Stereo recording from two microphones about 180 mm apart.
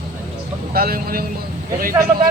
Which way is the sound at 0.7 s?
55° right (ahead or behind).